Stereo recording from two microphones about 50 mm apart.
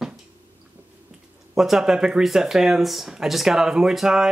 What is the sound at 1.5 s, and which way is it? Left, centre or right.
Speech, centre.